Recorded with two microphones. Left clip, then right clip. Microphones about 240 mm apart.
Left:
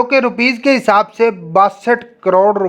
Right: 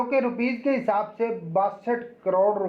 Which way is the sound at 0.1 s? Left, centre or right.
Left.